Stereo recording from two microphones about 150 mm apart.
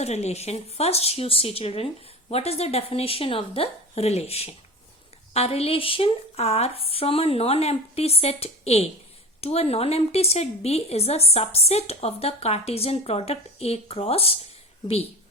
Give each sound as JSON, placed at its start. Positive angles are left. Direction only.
{"t": 0.0, "sound": "a woman's voice", "side_deg": 45}